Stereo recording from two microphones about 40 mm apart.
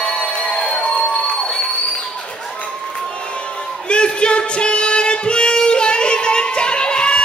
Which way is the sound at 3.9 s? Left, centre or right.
Left.